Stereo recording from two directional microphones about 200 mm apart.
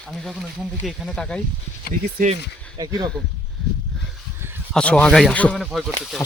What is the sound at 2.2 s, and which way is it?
Speech, 40° right (ahead or behind).